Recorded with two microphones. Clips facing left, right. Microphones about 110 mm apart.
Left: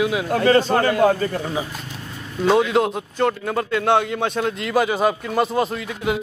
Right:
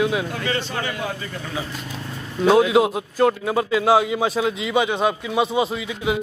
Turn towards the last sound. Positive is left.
turn(degrees=0)  # may be behind; listen again after turning